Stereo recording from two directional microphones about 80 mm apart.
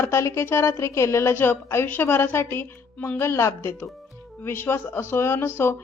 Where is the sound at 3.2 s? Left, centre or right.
Left.